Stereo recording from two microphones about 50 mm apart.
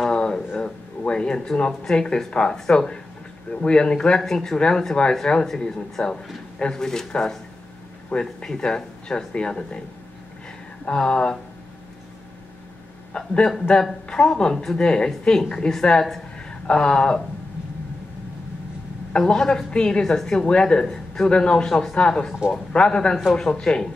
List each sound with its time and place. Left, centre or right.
0.1 s a sound: centre
0.6 s a woman's voice: centre
10.9 s a woman's voice: centre
13.1 s a woman's voice: centre
19.1 s a woman's voice: centre